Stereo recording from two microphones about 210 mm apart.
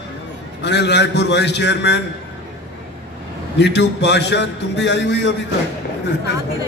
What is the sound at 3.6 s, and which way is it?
A man's voice, 55° left (ahead or behind).